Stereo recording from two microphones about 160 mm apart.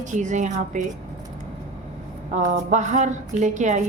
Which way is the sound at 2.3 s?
50° right (ahead or behind).